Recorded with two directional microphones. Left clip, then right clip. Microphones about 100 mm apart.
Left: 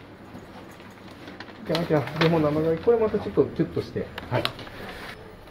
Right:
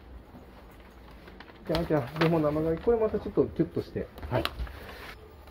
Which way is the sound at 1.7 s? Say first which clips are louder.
Left 4 dB; 30° left (ahead or behind).